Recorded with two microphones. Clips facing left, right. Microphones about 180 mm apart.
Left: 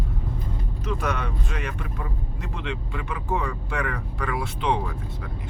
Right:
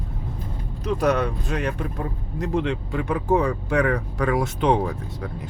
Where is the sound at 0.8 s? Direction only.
35° right (ahead or behind).